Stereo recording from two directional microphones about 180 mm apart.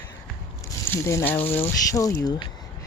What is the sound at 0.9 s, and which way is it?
Speech, 15° left (ahead or behind).